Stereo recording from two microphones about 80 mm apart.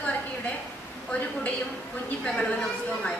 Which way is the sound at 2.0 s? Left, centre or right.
Centre.